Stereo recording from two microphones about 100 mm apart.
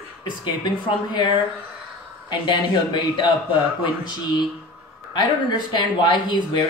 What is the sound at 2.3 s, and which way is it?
Speech, 55° left (ahead or behind).